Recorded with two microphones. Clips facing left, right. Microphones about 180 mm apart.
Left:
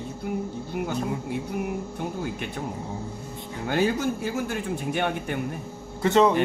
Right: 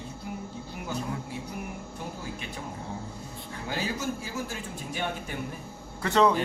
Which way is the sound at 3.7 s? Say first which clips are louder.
Left 8 dB; 60° left (ahead or behind).